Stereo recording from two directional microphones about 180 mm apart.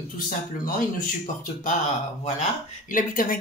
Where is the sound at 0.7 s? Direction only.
50° left (ahead or behind).